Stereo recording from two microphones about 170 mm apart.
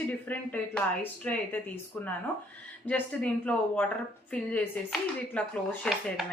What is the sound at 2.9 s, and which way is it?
A woman's voice, 5° left (ahead or behind).